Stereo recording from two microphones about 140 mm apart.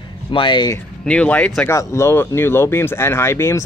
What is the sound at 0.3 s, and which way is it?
Speech, 35° left (ahead or behind).